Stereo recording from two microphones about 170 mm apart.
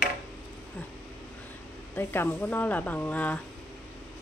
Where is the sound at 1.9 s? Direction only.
10° left (ahead or behind).